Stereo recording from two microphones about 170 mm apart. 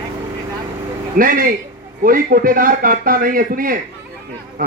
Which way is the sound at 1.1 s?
55° right (ahead or behind).